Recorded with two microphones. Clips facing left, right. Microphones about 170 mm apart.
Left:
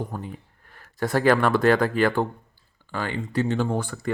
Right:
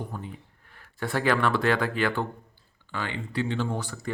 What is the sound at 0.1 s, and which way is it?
Speech, 45° left (ahead or behind).